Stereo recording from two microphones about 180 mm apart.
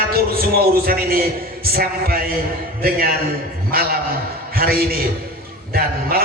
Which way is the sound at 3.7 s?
60° right (ahead or behind).